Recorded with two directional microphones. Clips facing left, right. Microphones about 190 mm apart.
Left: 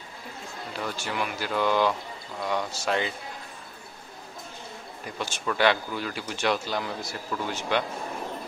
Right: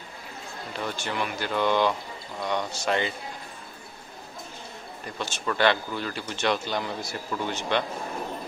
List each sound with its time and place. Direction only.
0.7 s speech: 5° left (ahead or behind)
5.2 s a man's voice: 10° left (ahead or behind)